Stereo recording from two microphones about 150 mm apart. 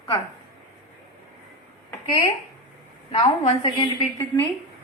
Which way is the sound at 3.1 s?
40° left (ahead or behind).